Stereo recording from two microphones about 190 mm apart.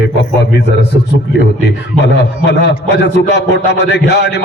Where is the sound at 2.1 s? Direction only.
65° left (ahead or behind).